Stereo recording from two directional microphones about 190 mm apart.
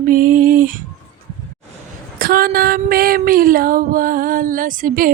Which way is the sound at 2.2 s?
50° right (ahead or behind).